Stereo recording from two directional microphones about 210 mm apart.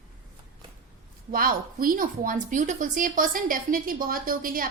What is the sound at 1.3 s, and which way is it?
A woman's voice, 45° right (ahead or behind).